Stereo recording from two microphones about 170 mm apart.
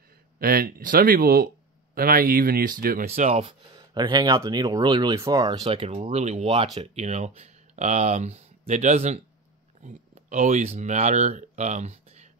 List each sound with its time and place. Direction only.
0.4 s speech: 60° right (ahead or behind)
3.1 s speech: 40° right (ahead or behind)
3.9 s speech: 25° right (ahead or behind)
5.6 s speech: 35° right (ahead or behind)